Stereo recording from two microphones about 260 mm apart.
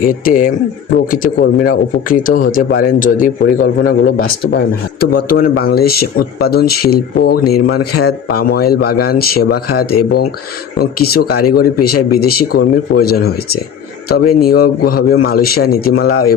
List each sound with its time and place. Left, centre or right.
0.3 s a man's voice: left